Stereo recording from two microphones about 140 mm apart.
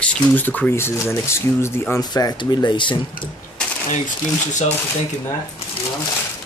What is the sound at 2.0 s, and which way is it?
Speech, 30° left (ahead or behind).